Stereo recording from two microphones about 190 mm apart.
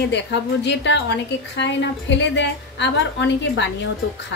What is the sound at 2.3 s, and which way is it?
Speech, 70° left (ahead or behind).